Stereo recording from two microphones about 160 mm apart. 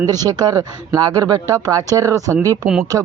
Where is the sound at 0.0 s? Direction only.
25° right (ahead or behind).